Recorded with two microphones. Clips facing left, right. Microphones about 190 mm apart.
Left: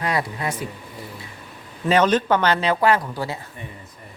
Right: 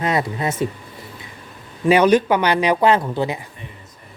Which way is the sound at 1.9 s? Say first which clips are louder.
Right 4 dB; 10° right (ahead or behind).